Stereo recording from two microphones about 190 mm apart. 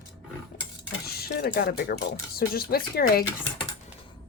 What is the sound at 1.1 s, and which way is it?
A woman's voice, 55° left (ahead or behind).